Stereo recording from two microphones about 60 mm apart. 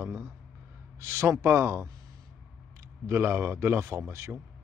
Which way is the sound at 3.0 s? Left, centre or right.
Right.